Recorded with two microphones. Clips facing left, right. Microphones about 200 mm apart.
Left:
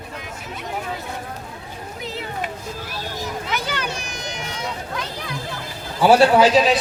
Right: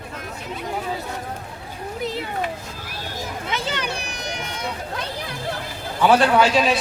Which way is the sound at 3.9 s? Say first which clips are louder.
Right 1 dB; 60° right (ahead or behind).